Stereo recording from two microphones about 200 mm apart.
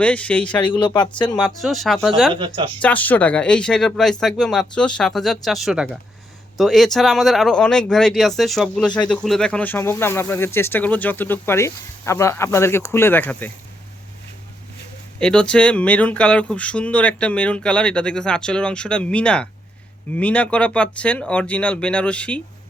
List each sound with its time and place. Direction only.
0.0 s speech: 5° left (ahead or behind)
0.6 s speech: 25° left (ahead or behind)
1.2 s speech: 5° left (ahead or behind)
2.3 s speech: 25° right (ahead or behind)
2.8 s speech: 10° left (ahead or behind)
15.2 s speech: 5° left (ahead or behind)